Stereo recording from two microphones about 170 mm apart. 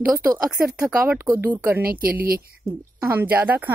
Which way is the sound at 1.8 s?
60° right (ahead or behind).